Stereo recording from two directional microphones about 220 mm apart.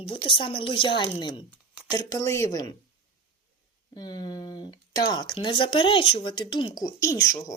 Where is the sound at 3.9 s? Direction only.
20° left (ahead or behind).